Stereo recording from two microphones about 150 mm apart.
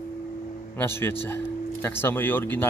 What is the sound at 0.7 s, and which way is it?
Speech, 15° left (ahead or behind).